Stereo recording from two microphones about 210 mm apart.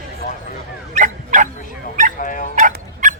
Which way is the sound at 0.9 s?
35° right (ahead or behind).